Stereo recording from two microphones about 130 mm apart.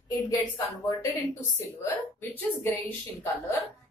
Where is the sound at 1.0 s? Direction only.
20° left (ahead or behind).